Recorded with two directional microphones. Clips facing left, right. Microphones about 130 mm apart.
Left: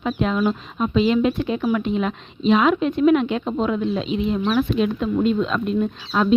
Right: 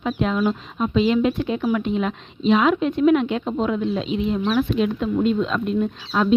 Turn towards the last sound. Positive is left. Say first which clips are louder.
# even
turn(degrees=25)  # may be behind; listen again after turning